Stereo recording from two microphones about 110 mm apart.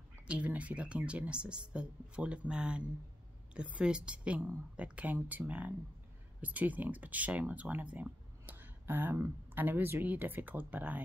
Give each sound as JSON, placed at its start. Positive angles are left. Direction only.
{"t": 0.3, "sound": "speech", "side_deg": -15}